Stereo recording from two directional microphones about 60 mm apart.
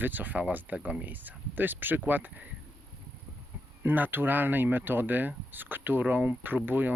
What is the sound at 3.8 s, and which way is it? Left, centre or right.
Speech, right.